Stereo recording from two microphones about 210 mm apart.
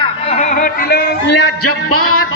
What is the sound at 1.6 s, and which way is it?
Music, 90° left.